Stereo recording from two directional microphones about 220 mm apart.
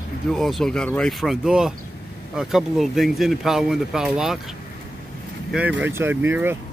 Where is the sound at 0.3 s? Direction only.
Centre (ahead or behind).